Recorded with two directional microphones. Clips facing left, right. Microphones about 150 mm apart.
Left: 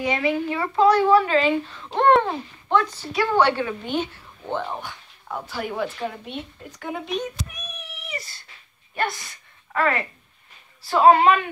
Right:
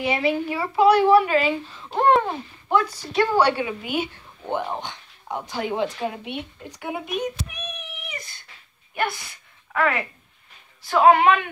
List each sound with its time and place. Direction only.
0.0 s a child's voice: 30° right (ahead or behind)
0.3 s speech: 15° right (ahead or behind)
9.7 s a woman's voice: centre (ahead or behind)